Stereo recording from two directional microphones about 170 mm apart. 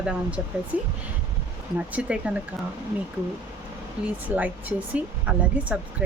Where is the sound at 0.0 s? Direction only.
5° right (ahead or behind).